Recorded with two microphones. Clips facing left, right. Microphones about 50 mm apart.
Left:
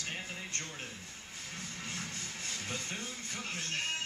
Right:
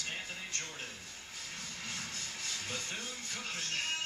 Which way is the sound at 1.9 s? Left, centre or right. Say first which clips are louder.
Left 1 dB; left.